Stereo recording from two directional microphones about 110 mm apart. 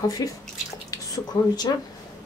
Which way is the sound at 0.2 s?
35° left (ahead or behind).